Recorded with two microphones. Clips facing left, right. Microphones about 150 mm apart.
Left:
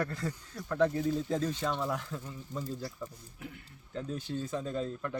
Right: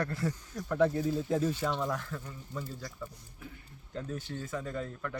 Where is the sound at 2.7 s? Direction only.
35° left (ahead or behind).